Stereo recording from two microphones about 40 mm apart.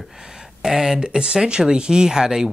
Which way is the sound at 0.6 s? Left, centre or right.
Centre.